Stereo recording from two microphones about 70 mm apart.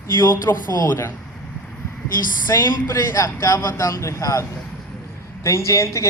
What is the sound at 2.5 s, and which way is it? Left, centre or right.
Speech, left.